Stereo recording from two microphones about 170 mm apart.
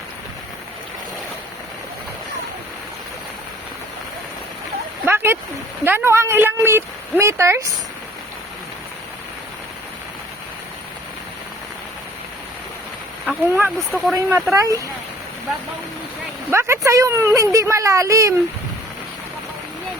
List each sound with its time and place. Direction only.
5.0 s a sound: 15° right (ahead or behind)
5.8 s speech: 15° right (ahead or behind)
13.2 s speech: 10° right (ahead or behind)
13.7 s speech: centre (ahead or behind)
14.2 s speech: 15° right (ahead or behind)
16.5 s a sound: 15° right (ahead or behind)